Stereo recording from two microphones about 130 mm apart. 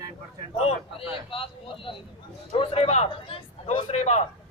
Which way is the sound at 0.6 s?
50° left (ahead or behind).